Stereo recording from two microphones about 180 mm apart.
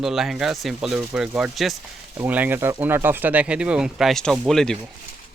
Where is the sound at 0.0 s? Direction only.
Centre (ahead or behind).